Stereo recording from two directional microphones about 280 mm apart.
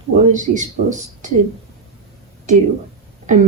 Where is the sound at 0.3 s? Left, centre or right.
Right.